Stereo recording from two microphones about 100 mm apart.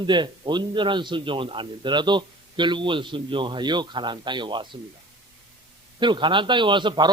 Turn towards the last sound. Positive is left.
turn(degrees=-50)  # may be behind; listen again after turning